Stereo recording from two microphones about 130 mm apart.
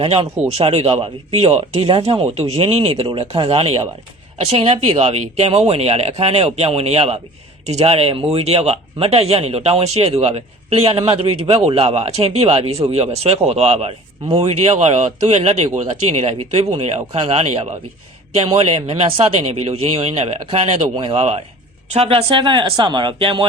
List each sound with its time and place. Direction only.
0.5 s speech: 55° right (ahead or behind)
17.1 s speech: 40° right (ahead or behind)
17.3 s speech: 55° right (ahead or behind)
18.9 s speech: 45° right (ahead or behind)